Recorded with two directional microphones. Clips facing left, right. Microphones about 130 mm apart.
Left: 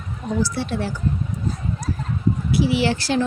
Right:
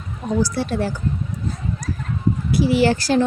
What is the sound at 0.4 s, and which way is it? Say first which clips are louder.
Speech: right 2 dB; 45° right (ahead or behind).